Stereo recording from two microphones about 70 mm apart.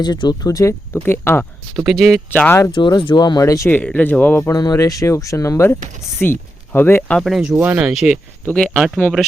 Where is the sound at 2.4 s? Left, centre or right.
Left.